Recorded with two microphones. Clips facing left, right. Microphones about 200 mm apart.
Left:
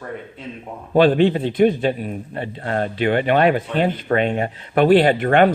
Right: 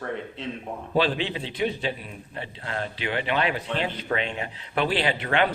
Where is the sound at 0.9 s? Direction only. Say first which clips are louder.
Left 11 dB; 50° left (ahead or behind).